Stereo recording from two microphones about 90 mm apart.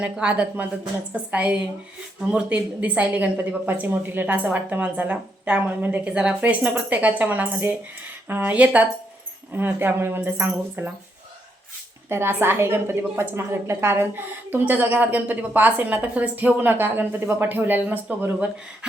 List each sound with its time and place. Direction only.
0.0 s a woman's voice: 10° right (ahead or behind)
12.0 s a woman's voice: 25° right (ahead or behind)